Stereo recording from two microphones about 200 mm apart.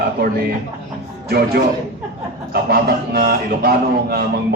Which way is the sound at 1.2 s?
50° right (ahead or behind).